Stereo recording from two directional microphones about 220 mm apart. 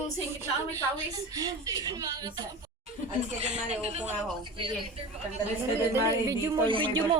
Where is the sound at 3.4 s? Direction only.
30° right (ahead or behind).